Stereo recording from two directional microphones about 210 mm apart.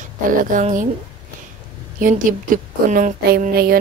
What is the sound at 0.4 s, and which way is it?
Speech, 40° right (ahead or behind).